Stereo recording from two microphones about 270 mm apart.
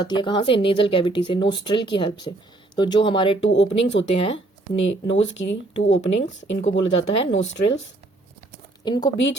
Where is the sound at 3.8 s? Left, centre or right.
Left.